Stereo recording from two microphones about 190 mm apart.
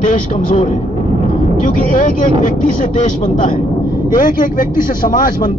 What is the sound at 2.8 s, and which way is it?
A man's voice, 40° left (ahead or behind).